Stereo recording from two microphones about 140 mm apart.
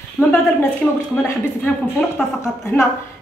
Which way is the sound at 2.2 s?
5° left (ahead or behind).